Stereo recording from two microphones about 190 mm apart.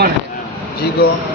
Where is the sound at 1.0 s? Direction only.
50° left (ahead or behind).